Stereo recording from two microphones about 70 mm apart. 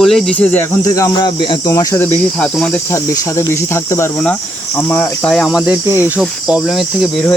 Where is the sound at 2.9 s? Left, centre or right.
Left.